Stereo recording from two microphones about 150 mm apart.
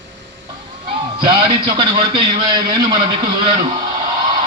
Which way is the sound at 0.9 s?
35° right (ahead or behind).